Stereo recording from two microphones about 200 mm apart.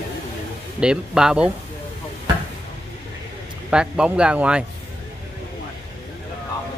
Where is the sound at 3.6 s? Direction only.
5° right (ahead or behind).